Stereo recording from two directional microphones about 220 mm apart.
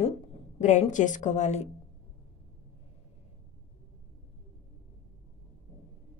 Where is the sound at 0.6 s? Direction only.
35° left (ahead or behind).